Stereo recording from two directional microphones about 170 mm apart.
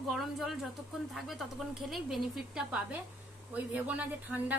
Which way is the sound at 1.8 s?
Centre (ahead or behind).